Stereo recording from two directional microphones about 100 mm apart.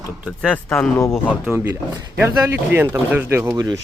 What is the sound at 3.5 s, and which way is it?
Speech, 35° right (ahead or behind).